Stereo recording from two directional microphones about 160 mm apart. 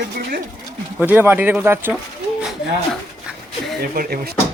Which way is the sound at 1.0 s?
15° right (ahead or behind).